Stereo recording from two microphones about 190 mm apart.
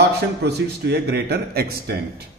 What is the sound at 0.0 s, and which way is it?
A man's voice, 60° right (ahead or behind).